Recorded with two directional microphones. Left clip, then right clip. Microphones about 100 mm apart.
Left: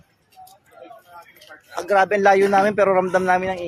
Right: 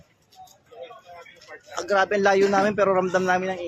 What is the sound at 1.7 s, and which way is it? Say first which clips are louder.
A man's voice: left 4 dB; 25° left (ahead or behind).